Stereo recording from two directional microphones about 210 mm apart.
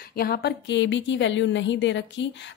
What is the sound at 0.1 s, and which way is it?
A woman's voice, 45° left (ahead or behind).